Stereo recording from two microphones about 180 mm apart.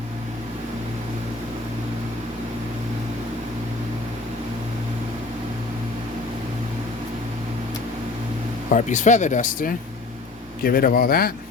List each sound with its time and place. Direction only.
8.7 s speech: 45° left (ahead or behind)